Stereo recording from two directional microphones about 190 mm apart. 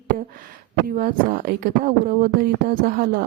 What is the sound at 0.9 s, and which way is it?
Speech, 50° right (ahead or behind).